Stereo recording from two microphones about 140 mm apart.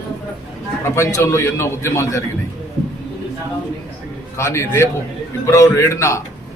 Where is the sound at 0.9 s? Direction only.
20° left (ahead or behind).